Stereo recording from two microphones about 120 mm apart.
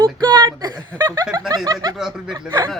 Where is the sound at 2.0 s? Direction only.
5° right (ahead or behind).